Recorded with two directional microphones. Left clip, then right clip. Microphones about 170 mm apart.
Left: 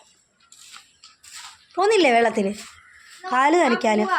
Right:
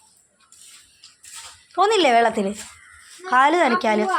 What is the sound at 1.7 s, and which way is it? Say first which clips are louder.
A woman's voice: right 1 dB; 20° left (ahead or behind).